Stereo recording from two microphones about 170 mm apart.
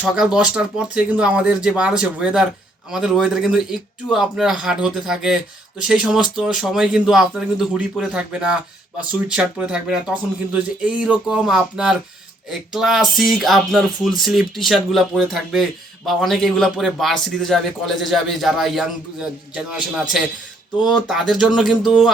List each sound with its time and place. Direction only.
0.0 s a man's voice: 5° right (ahead or behind)
20.9 s a man's voice: centre (ahead or behind)